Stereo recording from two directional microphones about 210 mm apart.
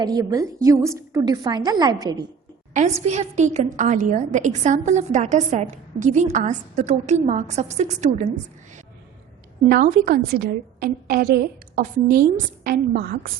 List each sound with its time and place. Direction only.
0.0 s a woman's voice: 20° right (ahead or behind)
2.7 s a woman's voice: 30° right (ahead or behind)
9.8 s a woman's voice: 45° right (ahead or behind)